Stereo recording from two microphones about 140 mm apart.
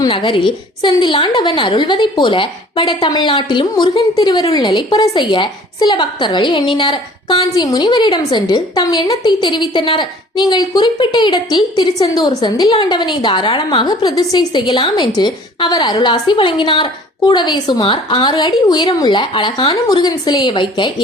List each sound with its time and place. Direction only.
0.0 s a woman's voice: 35° left (ahead or behind)